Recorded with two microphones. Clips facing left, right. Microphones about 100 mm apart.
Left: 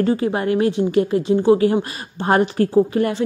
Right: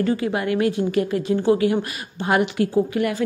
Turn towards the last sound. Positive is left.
turn(degrees=30)  # may be behind; listen again after turning